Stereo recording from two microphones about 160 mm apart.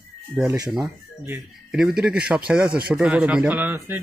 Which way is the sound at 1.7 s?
5° right (ahead or behind).